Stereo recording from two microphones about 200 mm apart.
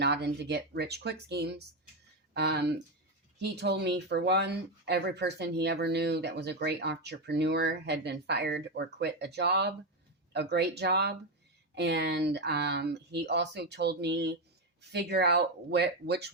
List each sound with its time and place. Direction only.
0.0 s speech: 55° right (ahead or behind)